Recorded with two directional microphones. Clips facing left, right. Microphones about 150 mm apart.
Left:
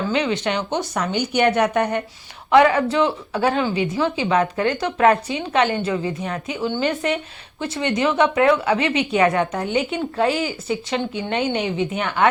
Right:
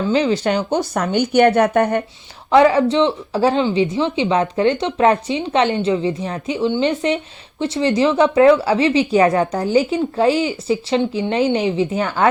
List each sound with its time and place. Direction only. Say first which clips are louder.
0.1 s speech: right 7 dB; 35° right (ahead or behind)
2.5 s speech: right 3 dB; 30° right (ahead or behind)